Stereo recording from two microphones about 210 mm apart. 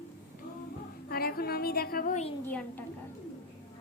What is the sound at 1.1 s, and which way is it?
A woman's voice, 45° left (ahead or behind).